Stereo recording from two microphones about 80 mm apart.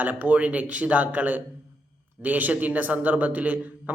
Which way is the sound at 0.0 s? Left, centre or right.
Right.